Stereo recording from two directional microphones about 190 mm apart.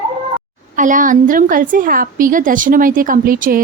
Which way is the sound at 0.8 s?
45° right (ahead or behind).